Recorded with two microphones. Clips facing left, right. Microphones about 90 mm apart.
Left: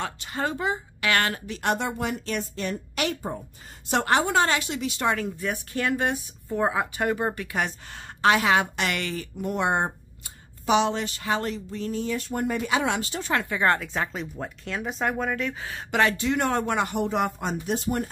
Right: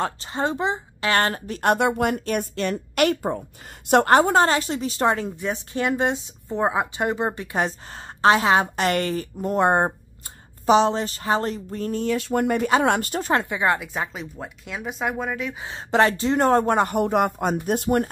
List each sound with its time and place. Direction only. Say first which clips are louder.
0.3 s speech: right 1 dB; 25° right (ahead or behind); by 1.8 s 45° right (ahead or behind)
1.8 s a woman's voice: right 7 dB; 60° right (ahead or behind)
2.5 s a woman's voice: right 5 dB; 65° right (ahead or behind)
3.9 s a woman's voice: right 6 dB; 45° right (ahead or behind)
12.1 s speech: right 8 dB; 75° right (ahead or behind)
12.6 s speech: right 6 dB; 50° right (ahead or behind)
13.3 s a woman's voice: right 4 dB; 25° right (ahead or behind)
13.6 s a woman's voice: right 1 dB; 10° right (ahead or behind)
15.6 s speech: right 5 dB; 25° right (ahead or behind); by 18.1 s 50° right (ahead or behind)